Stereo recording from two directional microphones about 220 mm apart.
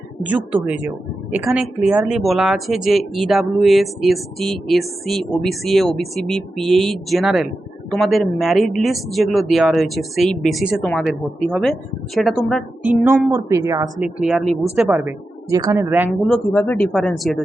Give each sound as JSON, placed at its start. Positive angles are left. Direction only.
{"t": 0.3, "sound": "a woman's voice", "side_deg": -5}
{"t": 14.0, "sound": "a woman's voice", "side_deg": -5}
{"t": 16.2, "sound": "speech", "side_deg": 5}